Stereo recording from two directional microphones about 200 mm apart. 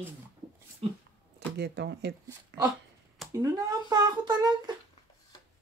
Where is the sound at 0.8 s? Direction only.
30° right (ahead or behind).